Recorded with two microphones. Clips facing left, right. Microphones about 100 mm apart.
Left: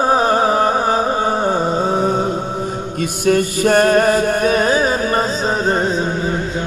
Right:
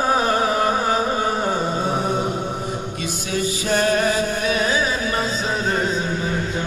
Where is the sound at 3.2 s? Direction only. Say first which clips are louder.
Left 11 dB; 55° left (ahead or behind); by 5.9 s 35° left (ahead or behind).